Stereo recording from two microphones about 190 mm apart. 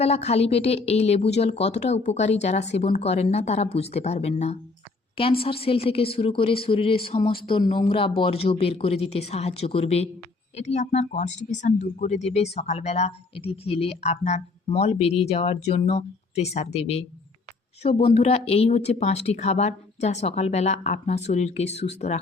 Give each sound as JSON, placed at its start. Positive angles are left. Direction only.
{"t": 0.0, "sound": "a woman's voice", "side_deg": 35}